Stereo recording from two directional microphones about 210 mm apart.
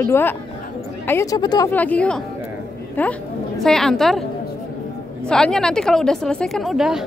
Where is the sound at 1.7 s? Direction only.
5° left (ahead or behind).